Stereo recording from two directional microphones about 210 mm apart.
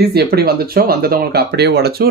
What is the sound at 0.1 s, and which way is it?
Speech, 50° right (ahead or behind).